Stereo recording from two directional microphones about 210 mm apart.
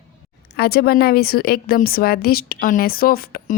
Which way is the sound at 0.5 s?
50° left (ahead or behind).